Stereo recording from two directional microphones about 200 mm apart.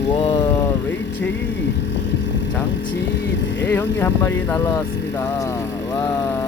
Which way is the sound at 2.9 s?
60° left (ahead or behind).